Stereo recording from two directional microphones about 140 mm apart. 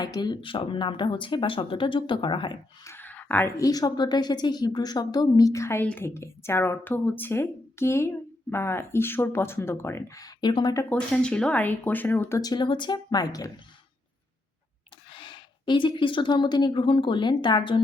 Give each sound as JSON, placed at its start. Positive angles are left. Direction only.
{"t": 0.0, "sound": "speech", "side_deg": 30}
{"t": 2.8, "sound": "a sound", "side_deg": 15}
{"t": 3.6, "sound": "a woman's voice", "side_deg": 25}
{"t": 10.8, "sound": "speech", "side_deg": 10}
{"t": 12.4, "sound": "a woman's voice", "side_deg": 30}
{"t": 15.1, "sound": "speech", "side_deg": 35}